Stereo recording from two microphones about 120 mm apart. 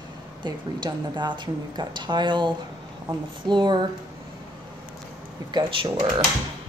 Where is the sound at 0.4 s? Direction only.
40° right (ahead or behind).